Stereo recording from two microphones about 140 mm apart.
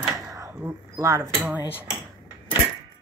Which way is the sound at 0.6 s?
15° right (ahead or behind).